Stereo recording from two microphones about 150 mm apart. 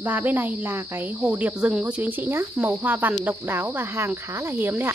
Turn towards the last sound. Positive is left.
turn(degrees=-15)  # may be behind; listen again after turning